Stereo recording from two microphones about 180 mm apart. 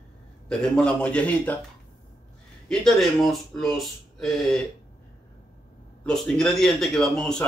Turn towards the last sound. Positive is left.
turn(degrees=5)  # may be behind; listen again after turning